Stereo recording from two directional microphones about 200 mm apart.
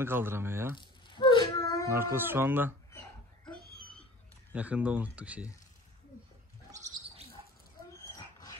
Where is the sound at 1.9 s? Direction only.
10° right (ahead or behind).